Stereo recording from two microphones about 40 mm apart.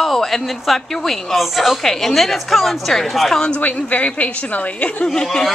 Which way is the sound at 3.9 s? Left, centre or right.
Left.